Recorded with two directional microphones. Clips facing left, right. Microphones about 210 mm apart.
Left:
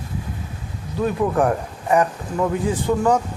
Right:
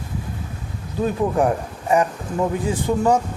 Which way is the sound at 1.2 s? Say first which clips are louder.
Even; 20° right (ahead or behind).